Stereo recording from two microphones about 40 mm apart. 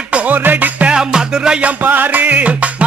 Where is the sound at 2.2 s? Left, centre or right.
Right.